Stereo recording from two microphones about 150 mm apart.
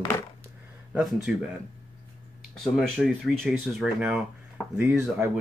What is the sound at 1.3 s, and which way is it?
Speech, 5° right (ahead or behind).